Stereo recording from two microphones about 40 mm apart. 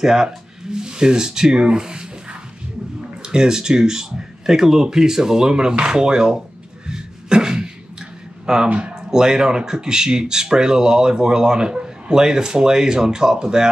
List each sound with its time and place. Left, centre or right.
0.0 s speech: centre
3.2 s speech: centre
6.9 s cough: centre
8.7 s speech: right